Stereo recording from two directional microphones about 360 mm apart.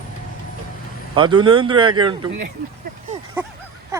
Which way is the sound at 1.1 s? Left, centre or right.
Centre.